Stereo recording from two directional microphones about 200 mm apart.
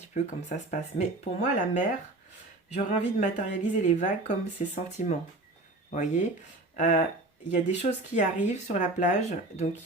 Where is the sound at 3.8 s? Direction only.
35° left (ahead or behind).